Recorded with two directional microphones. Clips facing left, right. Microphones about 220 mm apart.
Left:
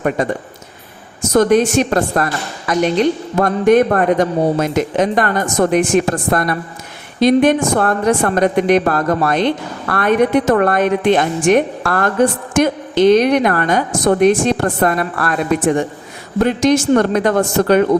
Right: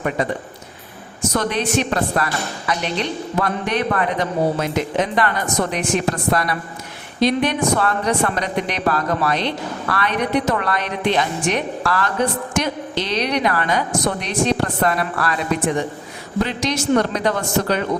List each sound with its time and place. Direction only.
1.3 s a woman's voice: 45° left (ahead or behind)